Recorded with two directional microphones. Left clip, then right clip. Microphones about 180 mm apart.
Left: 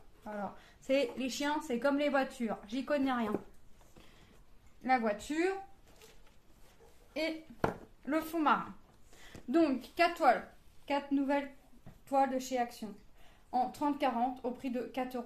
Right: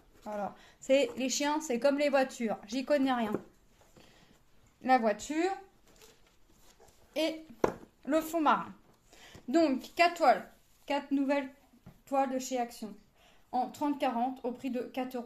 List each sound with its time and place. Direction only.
0.2 s a woman's voice: 30° right (ahead or behind)
4.8 s speech: 45° right (ahead or behind)
7.6 s speech: 25° right (ahead or behind)
12.1 s a woman's voice: 20° right (ahead or behind)